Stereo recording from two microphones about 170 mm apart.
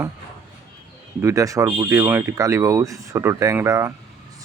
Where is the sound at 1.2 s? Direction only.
15° right (ahead or behind).